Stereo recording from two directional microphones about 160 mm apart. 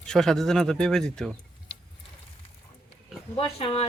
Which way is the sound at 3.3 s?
40° left (ahead or behind).